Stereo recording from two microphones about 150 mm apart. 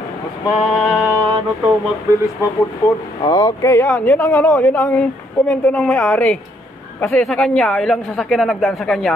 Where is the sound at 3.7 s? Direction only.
10° left (ahead or behind).